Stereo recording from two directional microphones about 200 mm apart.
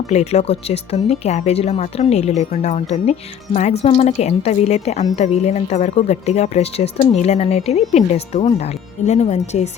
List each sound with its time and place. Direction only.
0.1 s speech: 35° left (ahead or behind)